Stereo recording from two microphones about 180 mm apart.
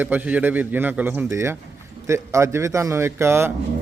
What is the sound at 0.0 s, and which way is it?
A man's voice, 10° right (ahead or behind).